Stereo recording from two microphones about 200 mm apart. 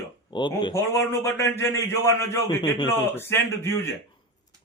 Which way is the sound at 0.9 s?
10° left (ahead or behind).